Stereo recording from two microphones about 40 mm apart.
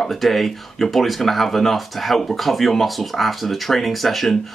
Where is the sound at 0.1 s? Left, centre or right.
Centre.